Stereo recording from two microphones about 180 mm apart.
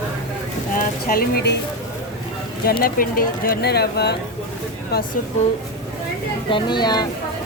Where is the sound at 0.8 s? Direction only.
55° left (ahead or behind).